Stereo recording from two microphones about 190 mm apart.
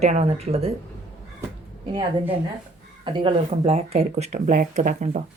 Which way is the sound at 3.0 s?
30° right (ahead or behind).